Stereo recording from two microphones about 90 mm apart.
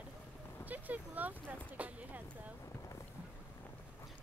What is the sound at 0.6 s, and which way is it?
Speech, 20° right (ahead or behind).